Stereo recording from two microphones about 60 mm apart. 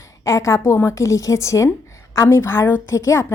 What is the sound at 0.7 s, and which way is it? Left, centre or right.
Speech, left.